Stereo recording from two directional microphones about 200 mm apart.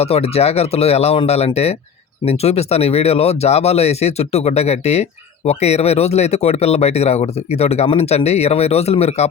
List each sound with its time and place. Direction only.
0.0 s speech: 30° left (ahead or behind)